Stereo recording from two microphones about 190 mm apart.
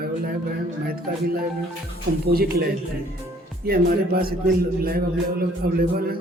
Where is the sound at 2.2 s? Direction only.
55° right (ahead or behind).